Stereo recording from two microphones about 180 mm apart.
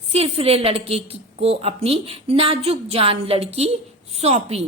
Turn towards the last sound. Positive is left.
turn(degrees=-35)  # may be behind; listen again after turning